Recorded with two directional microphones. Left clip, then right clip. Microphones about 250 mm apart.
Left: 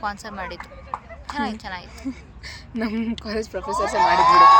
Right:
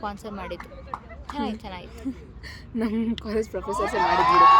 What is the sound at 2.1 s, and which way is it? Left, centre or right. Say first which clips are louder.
A woman's voice: left 2 dB; centre.